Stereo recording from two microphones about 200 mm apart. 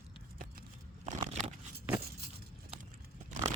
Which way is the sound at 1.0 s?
35° right (ahead or behind).